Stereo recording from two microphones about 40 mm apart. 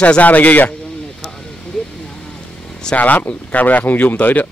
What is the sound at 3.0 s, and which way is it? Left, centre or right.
Speech, left.